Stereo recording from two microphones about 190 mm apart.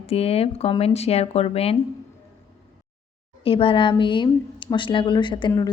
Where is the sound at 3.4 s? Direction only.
30° left (ahead or behind).